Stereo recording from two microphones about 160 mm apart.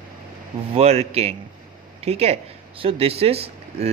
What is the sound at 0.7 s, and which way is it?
Speech, 40° right (ahead or behind).